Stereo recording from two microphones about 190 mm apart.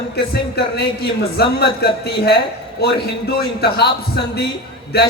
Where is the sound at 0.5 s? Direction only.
60° left (ahead or behind).